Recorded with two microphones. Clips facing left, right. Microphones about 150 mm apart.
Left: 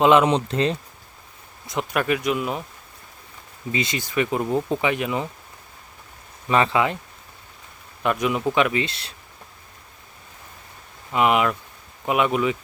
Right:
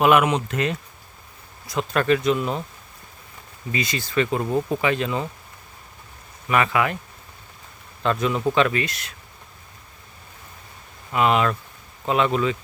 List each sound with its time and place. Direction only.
0.0 s speech: 25° left (ahead or behind)
2.0 s speech: 10° left (ahead or behind)
3.7 s speech: 20° left (ahead or behind)
6.5 s speech: 25° left (ahead or behind)
8.0 s speech: 15° left (ahead or behind)
8.8 s speech: 30° left (ahead or behind)
11.1 s speech: 15° left (ahead or behind)